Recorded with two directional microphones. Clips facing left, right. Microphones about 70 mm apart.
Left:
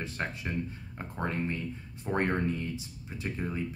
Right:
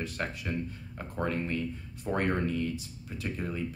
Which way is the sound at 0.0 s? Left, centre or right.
Left.